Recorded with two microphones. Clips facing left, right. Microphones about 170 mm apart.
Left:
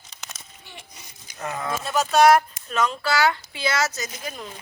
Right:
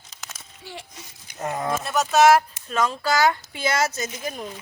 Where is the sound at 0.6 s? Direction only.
90° right.